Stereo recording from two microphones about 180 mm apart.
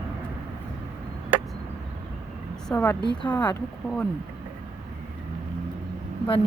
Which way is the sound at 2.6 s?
10° left (ahead or behind).